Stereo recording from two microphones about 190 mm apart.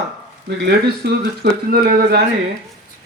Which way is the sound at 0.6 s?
55° right (ahead or behind).